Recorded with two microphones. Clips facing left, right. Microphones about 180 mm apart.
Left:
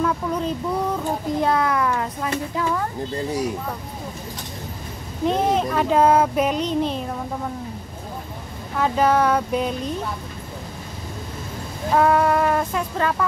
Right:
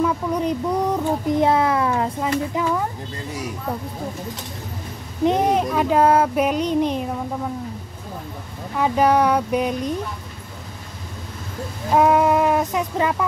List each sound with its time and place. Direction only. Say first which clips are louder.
0.0 s speech: right 2 dB; 15° right (ahead or behind)
5.2 s child singing: right 2 dB; 15° right (ahead or behind)
8.7 s child singing: right 1 dB; 10° right (ahead or behind)
11.9 s child singing: right 2 dB; 15° right (ahead or behind)